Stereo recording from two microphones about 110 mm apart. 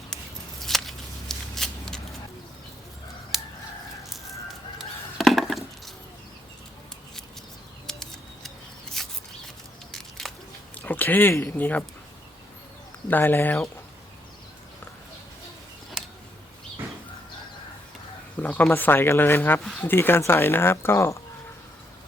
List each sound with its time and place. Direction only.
0.6 s a sound: centre (ahead or behind)
3.3 s chicken: centre (ahead or behind)
5.1 s a sound: centre (ahead or behind)
7.9 s bird: 5° left (ahead or behind)
8.4 s mouse: 5° left (ahead or behind)
9.9 s a sound: 5° left (ahead or behind)
10.8 s speech: 15° left (ahead or behind)
13.1 s speech: 15° left (ahead or behind)
18.4 s bird: 15° left (ahead or behind)
18.7 s speech: 20° left (ahead or behind)